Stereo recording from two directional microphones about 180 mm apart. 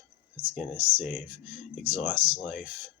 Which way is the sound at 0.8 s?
10° right (ahead or behind).